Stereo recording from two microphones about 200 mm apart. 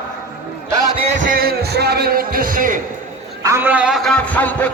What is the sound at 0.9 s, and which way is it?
Speech, 30° right (ahead or behind).